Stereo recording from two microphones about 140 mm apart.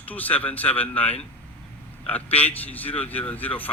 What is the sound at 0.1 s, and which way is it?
Speech, 10° left (ahead or behind).